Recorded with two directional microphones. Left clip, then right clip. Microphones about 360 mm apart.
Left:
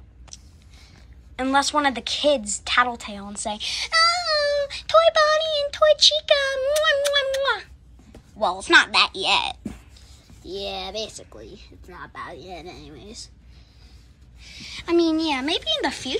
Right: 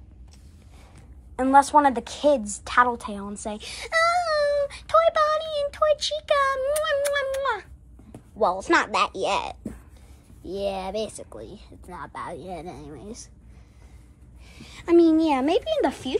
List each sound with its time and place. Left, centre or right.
1.3 s a woman's voice: centre
3.4 s child singing: centre
8.4 s a woman's voice: centre
10.5 s speech: right
14.4 s a woman's voice: centre